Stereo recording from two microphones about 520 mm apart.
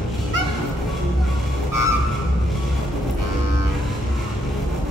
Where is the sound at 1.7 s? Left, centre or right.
Right.